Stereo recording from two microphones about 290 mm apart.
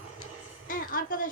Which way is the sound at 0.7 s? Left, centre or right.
Left.